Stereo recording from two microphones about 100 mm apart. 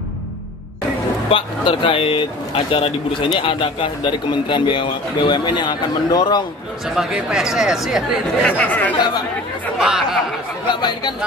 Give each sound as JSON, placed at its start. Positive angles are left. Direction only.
{"t": 1.3, "sound": "speech", "side_deg": 60}
{"t": 7.0, "sound": "speech", "side_deg": -5}
{"t": 8.5, "sound": "speech", "side_deg": 15}
{"t": 8.9, "sound": "speech", "side_deg": 45}
{"t": 9.8, "sound": "speech", "side_deg": -5}
{"t": 10.7, "sound": "speech", "side_deg": 50}